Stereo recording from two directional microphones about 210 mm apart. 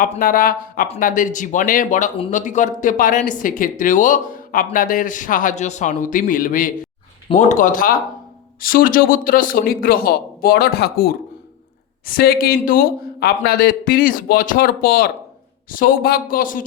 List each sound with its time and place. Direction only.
0.0 s speech: 40° left (ahead or behind)